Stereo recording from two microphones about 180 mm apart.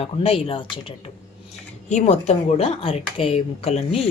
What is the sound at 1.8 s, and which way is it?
Speech, 40° left (ahead or behind).